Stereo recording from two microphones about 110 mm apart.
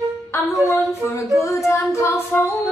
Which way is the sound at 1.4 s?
25° left (ahead or behind).